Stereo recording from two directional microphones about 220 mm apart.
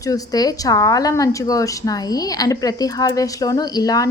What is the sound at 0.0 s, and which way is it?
Speech, 15° left (ahead or behind).